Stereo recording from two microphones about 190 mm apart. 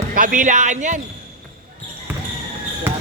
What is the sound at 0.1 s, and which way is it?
Speech, 45° right (ahead or behind).